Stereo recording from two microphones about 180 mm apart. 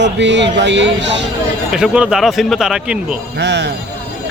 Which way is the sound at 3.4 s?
75° right (ahead or behind).